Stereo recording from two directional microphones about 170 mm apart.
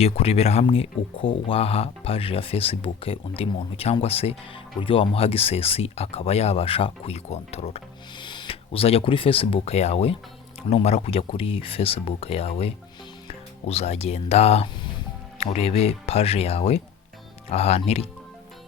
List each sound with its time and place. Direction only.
0.0 s speech: 35° left (ahead or behind)